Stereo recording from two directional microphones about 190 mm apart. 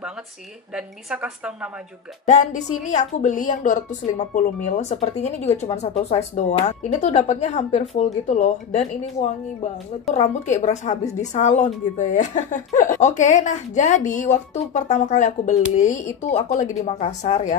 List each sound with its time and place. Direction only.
0.7 s a woman's voice: 5° right (ahead or behind)
2.8 s a woman's voice: 40° left (ahead or behind)